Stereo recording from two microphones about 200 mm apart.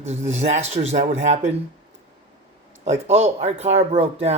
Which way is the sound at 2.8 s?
35° right (ahead or behind).